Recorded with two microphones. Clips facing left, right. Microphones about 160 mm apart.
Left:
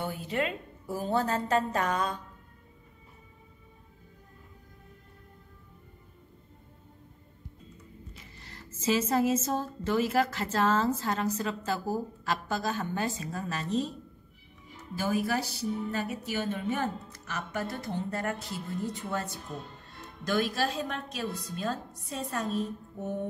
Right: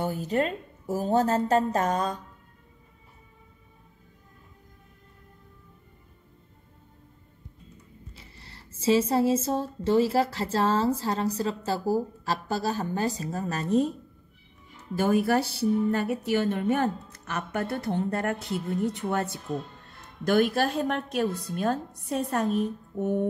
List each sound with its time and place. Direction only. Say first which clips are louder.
0.0 s speech: right 5 dB; 40° right (ahead or behind)
8.2 s speech: left 1 dB; 30° right (ahead or behind); by 13.9 s 50° right (ahead or behind)
15.0 s a woman's voice: right 6 dB; 55° right (ahead or behind)
20.2 s a woman's voice: right 6 dB; 55° right (ahead or behind)